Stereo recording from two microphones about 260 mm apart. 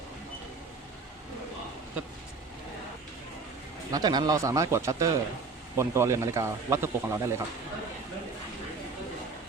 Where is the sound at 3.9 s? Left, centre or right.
Centre.